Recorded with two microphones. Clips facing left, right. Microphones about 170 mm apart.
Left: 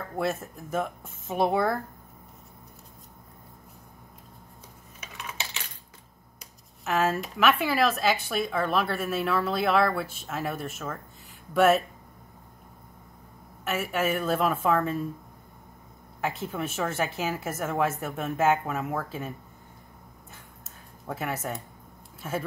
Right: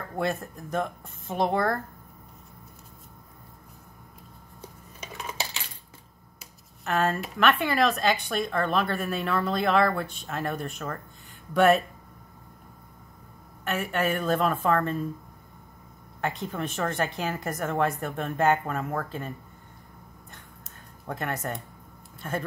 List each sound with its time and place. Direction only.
0.1 s speech: centre (ahead or behind)
4.6 s coin: 35° right (ahead or behind)
6.4 s speech: centre (ahead or behind)
13.7 s speech: 5° left (ahead or behind)
16.2 s speech: 5° left (ahead or behind)
20.2 s a sound: 5° left (ahead or behind)
22.2 s speech: 5° left (ahead or behind)